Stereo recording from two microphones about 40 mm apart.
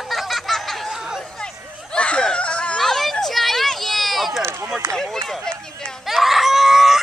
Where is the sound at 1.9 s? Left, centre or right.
Left.